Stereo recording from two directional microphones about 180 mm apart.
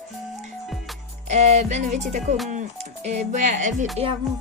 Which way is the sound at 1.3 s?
40° right (ahead or behind).